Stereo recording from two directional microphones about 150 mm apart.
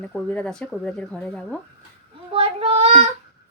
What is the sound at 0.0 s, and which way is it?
Speech, 10° left (ahead or behind).